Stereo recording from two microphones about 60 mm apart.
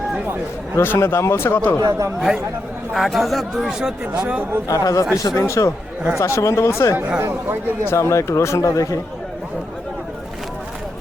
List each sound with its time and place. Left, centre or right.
0.8 s speech: left
1.8 s speech: right
2.9 s speech: centre
3.6 s speech: centre
4.0 s speech: right
4.7 s speech: left
5.1 s speech: left
5.4 s speech: left
7.2 s speech: right
7.9 s speech: left